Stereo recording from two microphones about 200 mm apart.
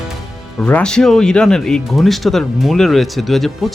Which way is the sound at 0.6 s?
5° left (ahead or behind).